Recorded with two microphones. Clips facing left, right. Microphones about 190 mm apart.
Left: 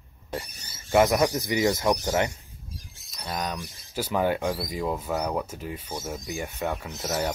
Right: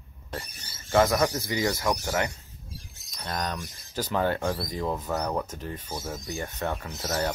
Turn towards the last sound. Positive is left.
turn(degrees=10)  # may be behind; listen again after turning